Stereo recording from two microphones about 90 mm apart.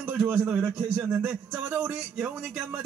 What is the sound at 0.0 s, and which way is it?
A man's voice, 20° right (ahead or behind).